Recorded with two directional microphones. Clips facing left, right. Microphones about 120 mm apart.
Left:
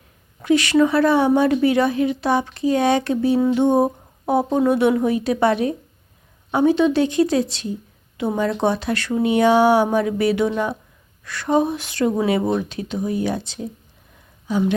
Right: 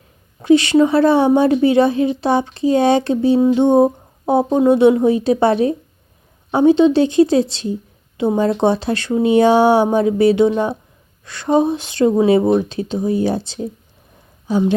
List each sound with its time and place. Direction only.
0.4 s a woman's voice: 25° right (ahead or behind)